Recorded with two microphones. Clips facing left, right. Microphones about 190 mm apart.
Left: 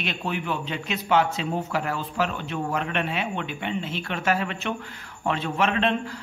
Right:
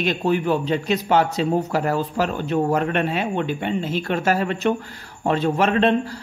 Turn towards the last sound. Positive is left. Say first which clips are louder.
# right 5 dB
turn(degrees=-40)  # may be behind; listen again after turning